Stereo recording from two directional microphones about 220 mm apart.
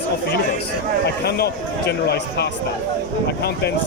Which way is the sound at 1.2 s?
45° left (ahead or behind).